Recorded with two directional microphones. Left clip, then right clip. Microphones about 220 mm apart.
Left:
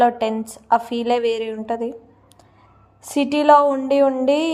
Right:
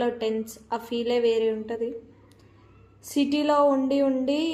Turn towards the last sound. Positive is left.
turn(degrees=30)  # may be behind; listen again after turning